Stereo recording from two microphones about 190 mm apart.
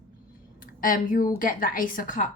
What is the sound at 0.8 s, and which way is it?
Speech, 45° left (ahead or behind).